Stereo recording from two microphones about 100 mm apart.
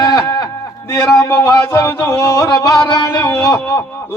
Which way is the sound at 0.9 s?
30° left (ahead or behind).